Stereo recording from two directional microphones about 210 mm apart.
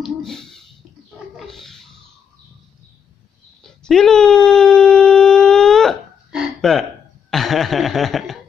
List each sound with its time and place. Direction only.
0.0 s speech: centre (ahead or behind)
1.3 s roaring cats: centre (ahead or behind)
3.6 s speech: centre (ahead or behind)
4.5 s a sound: 5° left (ahead or behind)